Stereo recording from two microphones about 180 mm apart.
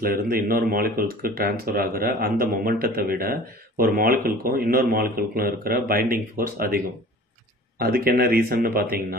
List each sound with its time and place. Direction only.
0.0 s speech: 55° right (ahead or behind)
7.8 s speech: 55° right (ahead or behind)